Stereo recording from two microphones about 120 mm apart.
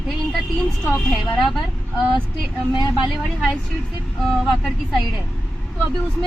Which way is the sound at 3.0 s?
Centre (ahead or behind).